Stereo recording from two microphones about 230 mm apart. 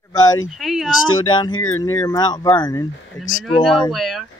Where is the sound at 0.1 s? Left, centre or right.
Centre.